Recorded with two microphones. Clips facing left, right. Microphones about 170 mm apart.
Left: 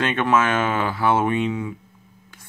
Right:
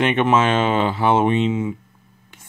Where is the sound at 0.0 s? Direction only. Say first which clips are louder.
Right 3 dB; 20° right (ahead or behind).